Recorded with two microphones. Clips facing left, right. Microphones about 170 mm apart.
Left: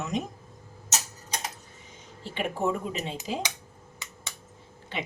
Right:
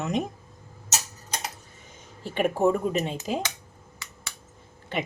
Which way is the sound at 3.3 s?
55° right (ahead or behind).